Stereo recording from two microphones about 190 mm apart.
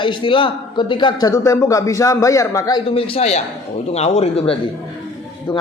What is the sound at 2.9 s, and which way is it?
A man's voice, 30° left (ahead or behind).